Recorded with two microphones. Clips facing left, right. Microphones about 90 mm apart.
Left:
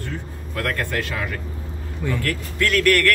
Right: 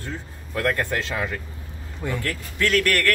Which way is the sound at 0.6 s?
25° right (ahead or behind).